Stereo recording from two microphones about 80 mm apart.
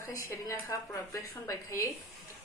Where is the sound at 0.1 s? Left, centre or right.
Left.